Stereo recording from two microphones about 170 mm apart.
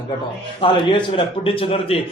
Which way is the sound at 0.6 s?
30° left (ahead or behind).